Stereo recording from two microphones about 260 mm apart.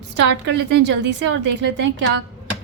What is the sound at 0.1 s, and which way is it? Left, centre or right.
A woman's voice, right.